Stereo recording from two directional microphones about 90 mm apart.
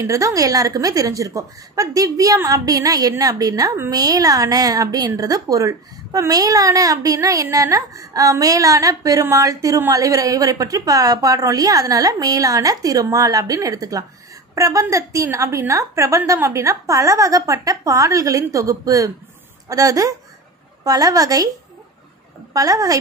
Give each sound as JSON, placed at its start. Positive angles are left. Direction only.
{"t": 0.0, "sound": "a woman's voice", "side_deg": -40}
{"t": 22.5, "sound": "a woman's voice", "side_deg": -40}